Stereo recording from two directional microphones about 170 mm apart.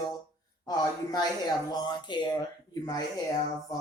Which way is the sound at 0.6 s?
25° left (ahead or behind).